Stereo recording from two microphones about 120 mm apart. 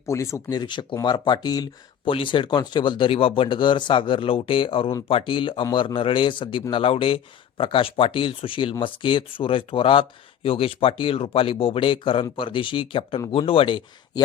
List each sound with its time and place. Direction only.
0.0 s speech: 25° left (ahead or behind)
2.0 s speech: 45° left (ahead or behind)